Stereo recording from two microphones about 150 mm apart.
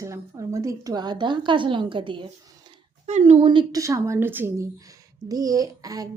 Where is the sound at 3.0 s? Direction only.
45° right (ahead or behind).